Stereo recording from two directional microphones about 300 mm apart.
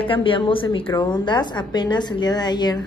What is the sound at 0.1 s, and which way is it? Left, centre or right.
A woman's voice, centre.